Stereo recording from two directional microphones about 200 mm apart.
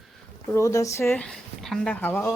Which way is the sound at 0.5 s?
15° left (ahead or behind).